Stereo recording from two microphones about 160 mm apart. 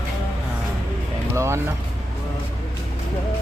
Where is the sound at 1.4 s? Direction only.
15° right (ahead or behind).